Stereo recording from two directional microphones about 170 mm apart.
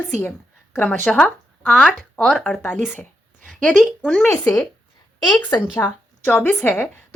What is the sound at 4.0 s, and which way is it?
Speech, centre (ahead or behind).